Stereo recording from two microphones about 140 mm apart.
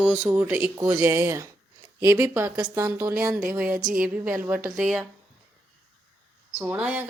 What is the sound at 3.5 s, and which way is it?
Speech, 10° right (ahead or behind).